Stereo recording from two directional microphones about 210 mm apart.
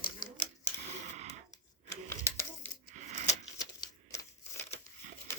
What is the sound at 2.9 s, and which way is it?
Coin, 35° right (ahead or behind).